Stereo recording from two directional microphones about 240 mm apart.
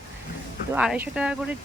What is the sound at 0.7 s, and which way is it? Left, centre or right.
Speech, centre.